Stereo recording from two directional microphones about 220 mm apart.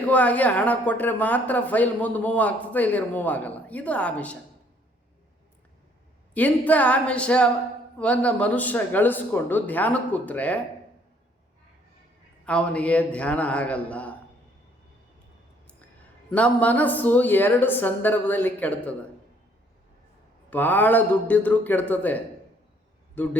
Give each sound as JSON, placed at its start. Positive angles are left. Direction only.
{"t": 0.1, "sound": "speech", "side_deg": 5}
{"t": 6.3, "sound": "a man's voice", "side_deg": 5}
{"t": 12.5, "sound": "a man's voice", "side_deg": 5}
{"t": 16.3, "sound": "speech", "side_deg": 5}
{"t": 20.5, "sound": "a man's voice", "side_deg": 10}